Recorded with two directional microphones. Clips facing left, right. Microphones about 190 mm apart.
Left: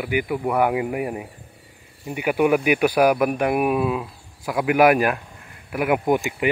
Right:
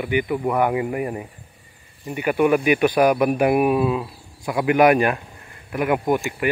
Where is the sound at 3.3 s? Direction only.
10° right (ahead or behind).